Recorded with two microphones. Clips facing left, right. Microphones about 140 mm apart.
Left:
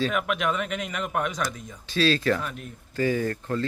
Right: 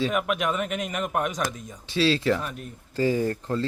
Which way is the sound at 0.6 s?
45° right (ahead or behind).